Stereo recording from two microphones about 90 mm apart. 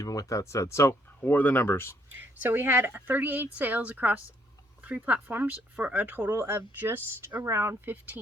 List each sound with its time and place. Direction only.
0.0 s speech: 40° left (ahead or behind)
1.2 s speech: 20° left (ahead or behind)
2.4 s a woman's voice: 25° right (ahead or behind)